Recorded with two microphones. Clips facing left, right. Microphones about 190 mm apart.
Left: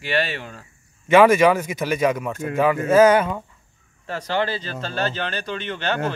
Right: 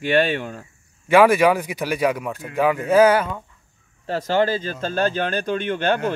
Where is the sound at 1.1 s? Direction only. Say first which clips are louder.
Left 1 dB; 10° right (ahead or behind).